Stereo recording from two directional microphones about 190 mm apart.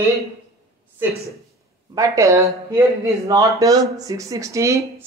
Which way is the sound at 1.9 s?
15° right (ahead or behind).